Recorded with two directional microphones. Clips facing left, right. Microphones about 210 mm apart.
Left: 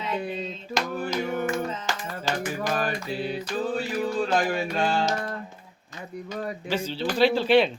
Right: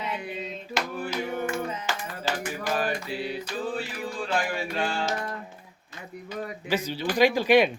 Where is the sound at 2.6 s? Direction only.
45° left (ahead or behind).